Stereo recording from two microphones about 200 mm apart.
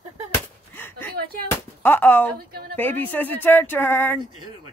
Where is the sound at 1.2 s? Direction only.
50° right (ahead or behind).